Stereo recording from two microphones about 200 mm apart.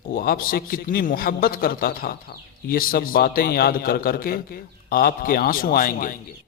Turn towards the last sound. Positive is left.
turn(degrees=45)  # may be behind; listen again after turning